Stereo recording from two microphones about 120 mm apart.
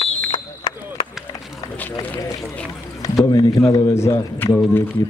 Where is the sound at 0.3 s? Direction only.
40° left (ahead or behind).